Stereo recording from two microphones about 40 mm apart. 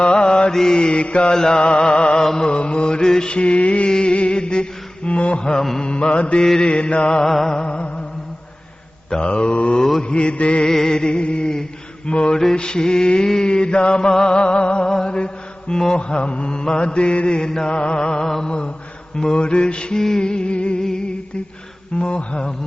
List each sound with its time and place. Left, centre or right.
0.0 s mantra: left
2.6 s mantra: left
6.4 s mantra: centre
7.3 s mantra: centre
7.6 s mantra: left
9.0 s mantra: left
10.7 s mantra: centre
12.3 s mantra: centre
12.5 s mantra: left
21.9 s mantra: left